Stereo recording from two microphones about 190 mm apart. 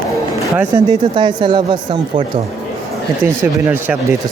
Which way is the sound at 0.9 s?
25° right (ahead or behind).